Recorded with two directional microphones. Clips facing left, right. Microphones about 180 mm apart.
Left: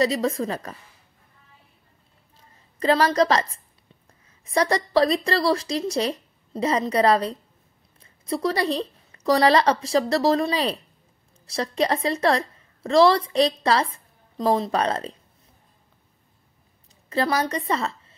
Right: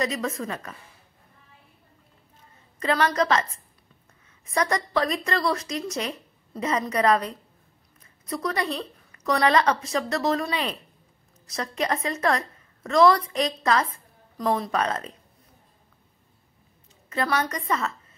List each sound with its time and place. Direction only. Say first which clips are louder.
0.0 s a woman's voice: left 6 dB; 30° left (ahead or behind)
2.3 s a sound: left 1 dB; 30° left (ahead or behind)
4.5 s a woman's voice: left 3 dB; 30° left (ahead or behind)
17.1 s a woman's voice: left 3 dB; 30° left (ahead or behind)